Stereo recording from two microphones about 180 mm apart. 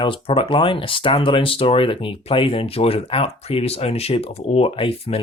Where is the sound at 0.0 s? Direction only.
30° left (ahead or behind).